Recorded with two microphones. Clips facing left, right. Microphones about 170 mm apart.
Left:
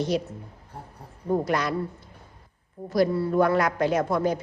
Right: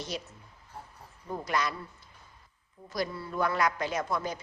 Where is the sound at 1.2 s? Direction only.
55° left (ahead or behind).